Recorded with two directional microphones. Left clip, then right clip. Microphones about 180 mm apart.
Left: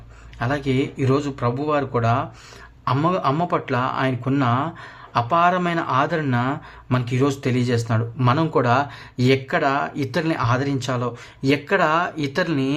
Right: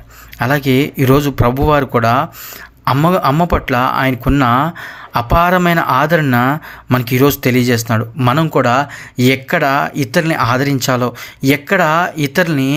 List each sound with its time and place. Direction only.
0.3 s speech: 30° right (ahead or behind)